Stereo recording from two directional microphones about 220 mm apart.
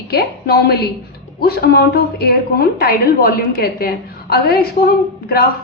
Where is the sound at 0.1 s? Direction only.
45° left (ahead or behind).